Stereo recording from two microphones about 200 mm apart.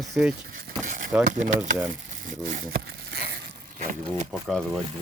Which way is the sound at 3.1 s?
55° right (ahead or behind).